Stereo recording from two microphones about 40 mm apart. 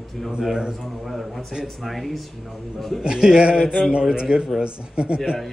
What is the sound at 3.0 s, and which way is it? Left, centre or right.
Speech, centre.